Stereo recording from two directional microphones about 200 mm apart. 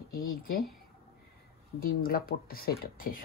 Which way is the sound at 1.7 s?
45° left (ahead or behind).